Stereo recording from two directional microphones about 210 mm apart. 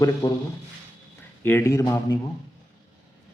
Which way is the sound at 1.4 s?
10° left (ahead or behind).